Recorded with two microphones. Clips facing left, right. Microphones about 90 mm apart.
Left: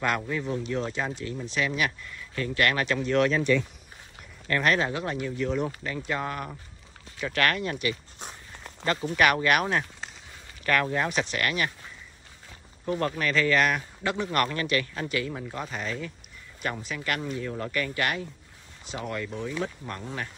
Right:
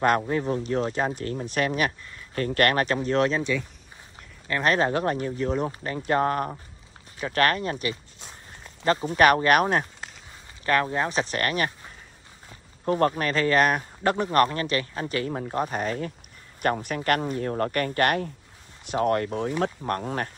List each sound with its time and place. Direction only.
0.3 s speech: 40° right (ahead or behind)
4.6 s speech: 40° right (ahead or behind)
6.0 s speech: 45° right (ahead or behind)
10.6 s speech: 30° right (ahead or behind); by 20.2 s 50° right (ahead or behind)